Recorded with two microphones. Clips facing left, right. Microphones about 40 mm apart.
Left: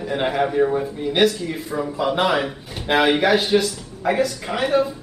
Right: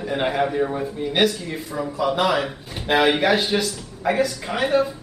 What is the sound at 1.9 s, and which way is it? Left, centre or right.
Speech, left.